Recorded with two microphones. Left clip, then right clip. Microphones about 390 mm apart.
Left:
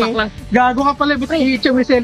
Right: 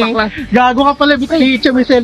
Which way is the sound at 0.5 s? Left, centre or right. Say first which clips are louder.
Right 4 dB; left.